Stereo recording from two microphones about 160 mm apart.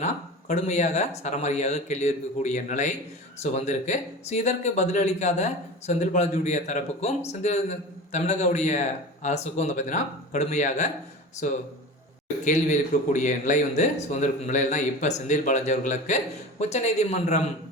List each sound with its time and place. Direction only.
0.0 s speech: 45° left (ahead or behind)